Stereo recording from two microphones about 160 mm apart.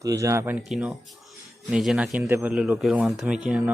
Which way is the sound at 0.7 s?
5° right (ahead or behind).